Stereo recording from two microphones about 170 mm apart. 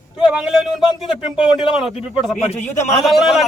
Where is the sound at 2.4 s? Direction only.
40° left (ahead or behind).